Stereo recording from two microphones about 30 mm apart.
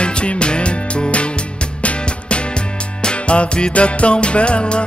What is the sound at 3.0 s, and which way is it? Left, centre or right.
Music, left.